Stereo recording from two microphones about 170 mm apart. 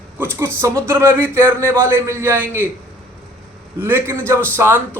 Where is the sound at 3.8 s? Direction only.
15° right (ahead or behind).